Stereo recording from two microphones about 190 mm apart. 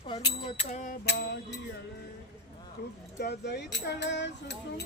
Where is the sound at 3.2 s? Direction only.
60° left (ahead or behind).